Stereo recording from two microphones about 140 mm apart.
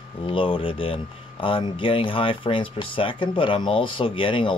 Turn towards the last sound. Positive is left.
turn(degrees=40)  # may be behind; listen again after turning